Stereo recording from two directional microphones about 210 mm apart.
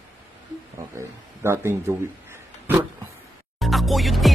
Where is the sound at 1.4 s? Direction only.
10° right (ahead or behind).